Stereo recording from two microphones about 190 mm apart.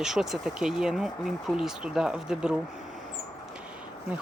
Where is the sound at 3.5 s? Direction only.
5° right (ahead or behind).